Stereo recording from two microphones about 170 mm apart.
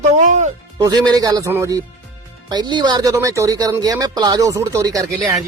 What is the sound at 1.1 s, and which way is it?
Speech, 20° right (ahead or behind).